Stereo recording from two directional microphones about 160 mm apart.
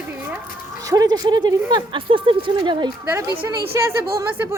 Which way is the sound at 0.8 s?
20° right (ahead or behind).